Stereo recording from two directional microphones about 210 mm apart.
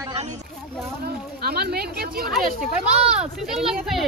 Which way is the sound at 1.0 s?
50° right (ahead or behind).